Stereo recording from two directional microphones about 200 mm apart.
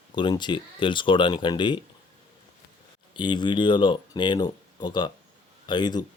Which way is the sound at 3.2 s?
25° left (ahead or behind).